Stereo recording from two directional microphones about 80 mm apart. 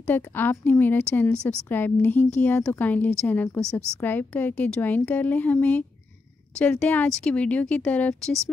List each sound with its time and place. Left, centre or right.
0.0 s a woman's voice: left